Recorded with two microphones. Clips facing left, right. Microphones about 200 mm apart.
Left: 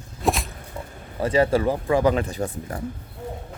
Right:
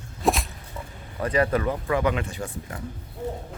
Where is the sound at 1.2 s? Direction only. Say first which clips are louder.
Left 3 dB; 25° left (ahead or behind).